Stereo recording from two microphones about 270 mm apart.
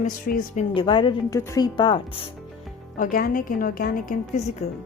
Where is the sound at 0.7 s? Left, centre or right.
Centre.